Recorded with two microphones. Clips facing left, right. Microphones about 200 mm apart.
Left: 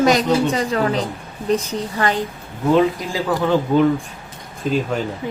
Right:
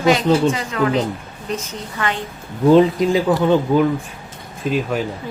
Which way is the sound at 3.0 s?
20° right (ahead or behind).